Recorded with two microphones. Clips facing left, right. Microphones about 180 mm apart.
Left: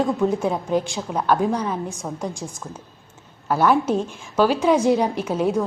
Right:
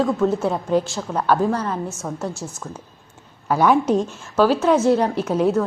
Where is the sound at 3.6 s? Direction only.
5° left (ahead or behind).